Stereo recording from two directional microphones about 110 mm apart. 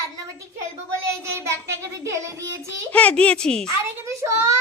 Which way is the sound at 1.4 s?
25° right (ahead or behind).